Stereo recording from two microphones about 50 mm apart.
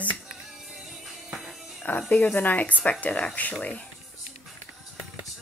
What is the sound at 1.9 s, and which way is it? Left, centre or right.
Speech, left.